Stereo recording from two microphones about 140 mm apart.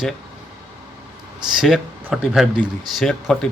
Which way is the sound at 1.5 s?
5° right (ahead or behind).